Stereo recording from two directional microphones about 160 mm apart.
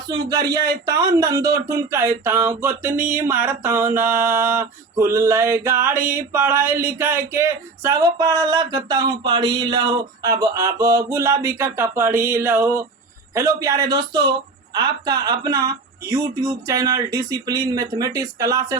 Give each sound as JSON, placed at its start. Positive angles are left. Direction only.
{"t": 0.1, "sound": "speech", "side_deg": -25}